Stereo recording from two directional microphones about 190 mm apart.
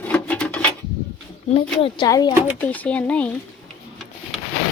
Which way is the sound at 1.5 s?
30° left (ahead or behind).